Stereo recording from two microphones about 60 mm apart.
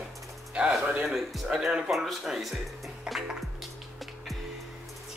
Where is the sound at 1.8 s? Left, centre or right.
Centre.